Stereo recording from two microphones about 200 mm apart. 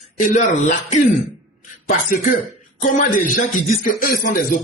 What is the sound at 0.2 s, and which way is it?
Speech, 40° left (ahead or behind).